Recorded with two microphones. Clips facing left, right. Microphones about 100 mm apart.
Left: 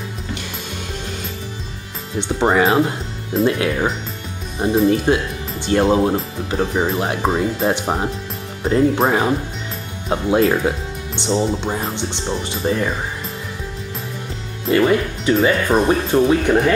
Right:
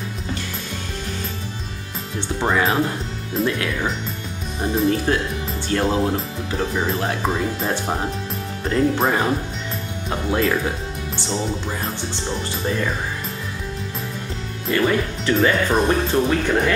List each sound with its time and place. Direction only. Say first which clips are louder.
2.1 s speech: left 4 dB; 25° left (ahead or behind)
14.7 s speech: left 4 dB; 20° left (ahead or behind)